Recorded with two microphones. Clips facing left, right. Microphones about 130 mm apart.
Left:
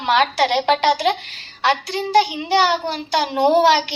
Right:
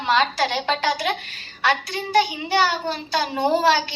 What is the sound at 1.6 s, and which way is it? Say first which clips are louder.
A child's voice: left 3 dB; 25° left (ahead or behind).